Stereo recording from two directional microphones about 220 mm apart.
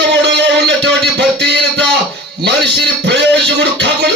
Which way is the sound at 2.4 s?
50° right (ahead or behind).